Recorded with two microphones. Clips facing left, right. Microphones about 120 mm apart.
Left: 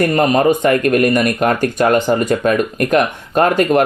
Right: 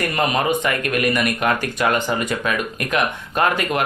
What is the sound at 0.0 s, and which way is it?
Speech, 45° left (ahead or behind).